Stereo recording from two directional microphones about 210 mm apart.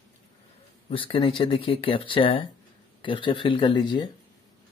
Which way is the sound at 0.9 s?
25° left (ahead or behind).